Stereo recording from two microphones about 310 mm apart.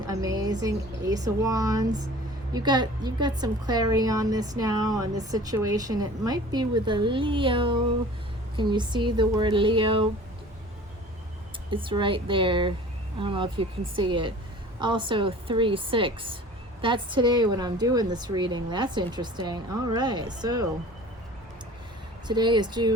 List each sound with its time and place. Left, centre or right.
0.0 s a sound: centre
1.1 s a woman's voice: centre
11.7 s a woman's voice: centre
22.3 s a woman's voice: centre